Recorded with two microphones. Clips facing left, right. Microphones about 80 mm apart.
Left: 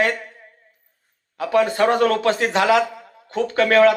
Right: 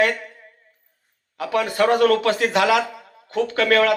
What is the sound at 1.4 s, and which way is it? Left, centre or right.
A man's voice, left.